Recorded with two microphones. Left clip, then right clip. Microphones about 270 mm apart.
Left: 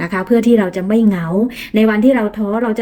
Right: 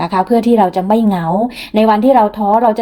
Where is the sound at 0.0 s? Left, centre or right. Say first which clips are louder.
Right 2 dB; centre.